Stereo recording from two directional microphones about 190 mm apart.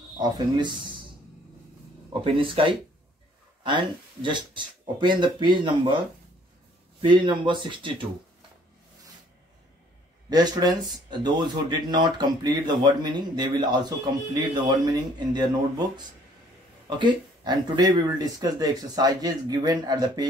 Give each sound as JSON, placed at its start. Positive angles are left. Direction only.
{"t": 0.2, "sound": "speech", "side_deg": -25}
{"t": 2.2, "sound": "speech", "side_deg": -30}
{"t": 7.0, "sound": "speech", "side_deg": -25}
{"t": 10.3, "sound": "speech", "side_deg": -20}
{"t": 17.0, "sound": "speech", "side_deg": -20}